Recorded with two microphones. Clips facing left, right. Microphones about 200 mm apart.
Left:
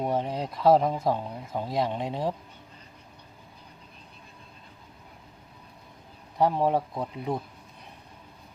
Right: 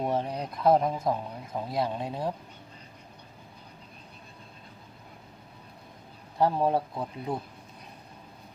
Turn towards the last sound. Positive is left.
turn(degrees=20)  # may be behind; listen again after turning